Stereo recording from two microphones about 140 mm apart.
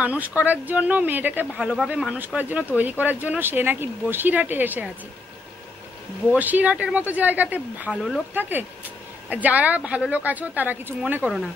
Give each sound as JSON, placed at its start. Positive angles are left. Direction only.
{"t": 0.0, "sound": "speech", "side_deg": -10}
{"t": 6.3, "sound": "speech", "side_deg": -10}
{"t": 8.4, "sound": "speech", "side_deg": -15}